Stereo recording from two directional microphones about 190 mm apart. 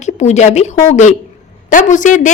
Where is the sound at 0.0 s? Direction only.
35° left (ahead or behind).